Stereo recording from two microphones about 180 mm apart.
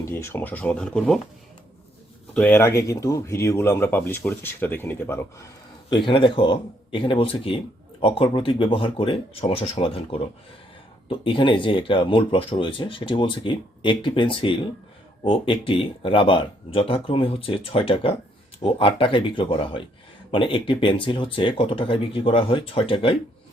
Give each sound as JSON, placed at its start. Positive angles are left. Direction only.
{"t": 0.0, "sound": "speech", "side_deg": 15}
{"t": 2.3, "sound": "speech", "side_deg": 10}
{"t": 6.1, "sound": "speech", "side_deg": 25}